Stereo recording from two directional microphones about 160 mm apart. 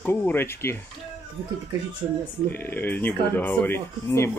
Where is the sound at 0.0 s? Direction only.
10° left (ahead or behind).